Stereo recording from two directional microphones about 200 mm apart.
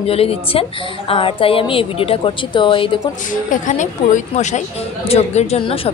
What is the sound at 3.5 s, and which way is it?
Speech, 40° left (ahead or behind).